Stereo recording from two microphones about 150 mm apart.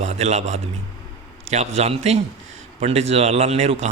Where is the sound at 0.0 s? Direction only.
50° right (ahead or behind).